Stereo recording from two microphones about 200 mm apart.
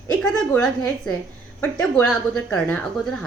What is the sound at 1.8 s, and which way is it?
Speech, 5° left (ahead or behind).